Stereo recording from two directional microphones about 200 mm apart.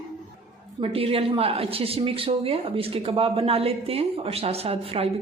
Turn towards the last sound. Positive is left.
turn(degrees=-30)  # may be behind; listen again after turning